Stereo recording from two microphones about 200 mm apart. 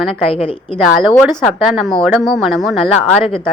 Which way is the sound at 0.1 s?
30° left (ahead or behind).